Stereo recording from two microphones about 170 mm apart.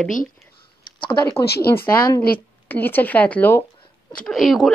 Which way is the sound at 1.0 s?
30° left (ahead or behind).